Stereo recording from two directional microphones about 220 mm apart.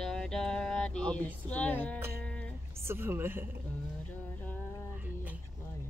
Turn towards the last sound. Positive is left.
turn(degrees=5)  # may be behind; listen again after turning